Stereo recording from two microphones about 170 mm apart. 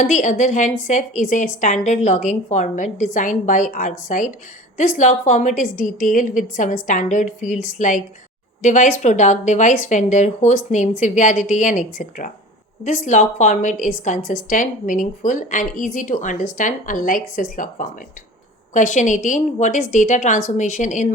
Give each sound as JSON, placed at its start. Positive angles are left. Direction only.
{"t": 0.0, "sound": "a woman's voice", "side_deg": 45}